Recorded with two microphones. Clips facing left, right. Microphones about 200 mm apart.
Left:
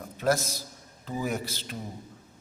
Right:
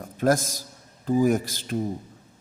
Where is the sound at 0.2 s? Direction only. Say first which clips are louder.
Right 4 dB; 50° right (ahead or behind).